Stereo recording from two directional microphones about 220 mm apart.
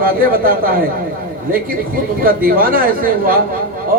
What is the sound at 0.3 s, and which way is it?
Speech, 40° right (ahead or behind).